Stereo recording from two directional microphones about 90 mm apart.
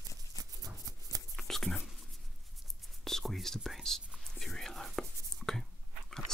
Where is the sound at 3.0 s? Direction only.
5° left (ahead or behind).